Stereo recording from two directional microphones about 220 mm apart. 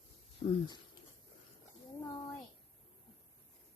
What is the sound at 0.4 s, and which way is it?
Speech, 25° left (ahead or behind).